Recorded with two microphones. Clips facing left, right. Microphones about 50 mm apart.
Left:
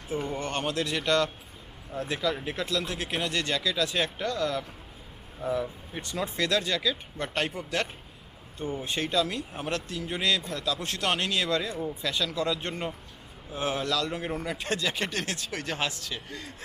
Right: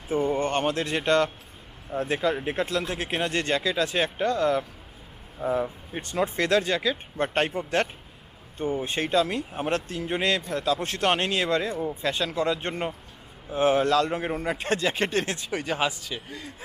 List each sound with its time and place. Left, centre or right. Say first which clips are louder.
0.1 s a man's voice: right 7 dB; right
6.0 s a man's voice: right 4 dB; right; by 16.6 s centre